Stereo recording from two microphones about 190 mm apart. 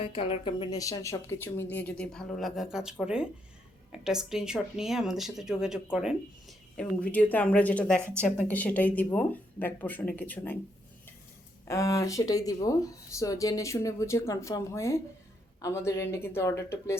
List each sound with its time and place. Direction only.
0.0 s speech: 30° left (ahead or behind); by 10.6 s 10° left (ahead or behind)
11.7 s speech: 15° left (ahead or behind)